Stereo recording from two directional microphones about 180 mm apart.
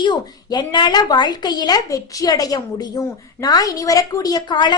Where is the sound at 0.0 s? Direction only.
25° left (ahead or behind).